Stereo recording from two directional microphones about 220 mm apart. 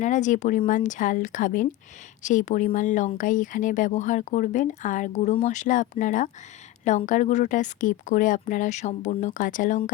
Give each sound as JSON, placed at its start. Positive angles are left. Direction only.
{"t": 0.0, "sound": "speech", "side_deg": 35}